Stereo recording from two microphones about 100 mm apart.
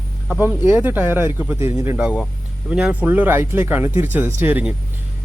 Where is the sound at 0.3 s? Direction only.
20° right (ahead or behind).